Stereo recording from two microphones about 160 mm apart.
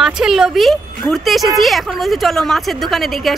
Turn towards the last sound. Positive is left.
turn(degrees=0)  # may be behind; listen again after turning